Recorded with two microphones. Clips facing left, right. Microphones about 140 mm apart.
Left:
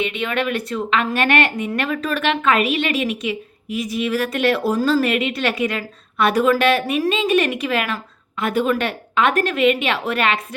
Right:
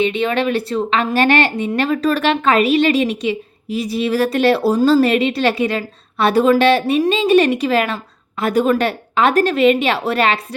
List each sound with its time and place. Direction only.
0.0 s speech: 30° right (ahead or behind)